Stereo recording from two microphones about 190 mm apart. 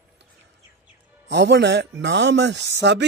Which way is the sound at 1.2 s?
65° right (ahead or behind).